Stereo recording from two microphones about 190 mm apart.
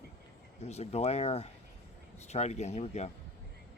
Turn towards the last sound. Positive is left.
turn(degrees=35)  # may be behind; listen again after turning